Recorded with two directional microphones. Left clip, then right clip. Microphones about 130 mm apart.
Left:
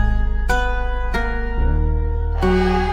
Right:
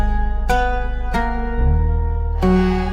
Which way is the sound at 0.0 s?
Centre (ahead or behind).